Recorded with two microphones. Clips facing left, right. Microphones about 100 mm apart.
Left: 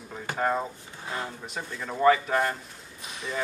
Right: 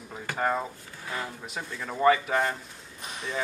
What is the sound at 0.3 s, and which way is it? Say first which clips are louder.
Speech: left 1 dB; 20° left (ahead or behind).